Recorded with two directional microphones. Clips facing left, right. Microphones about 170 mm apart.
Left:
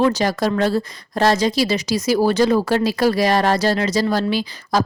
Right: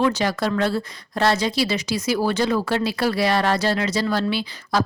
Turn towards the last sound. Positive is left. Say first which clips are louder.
# left 3 dB
turn(degrees=40)  # may be behind; listen again after turning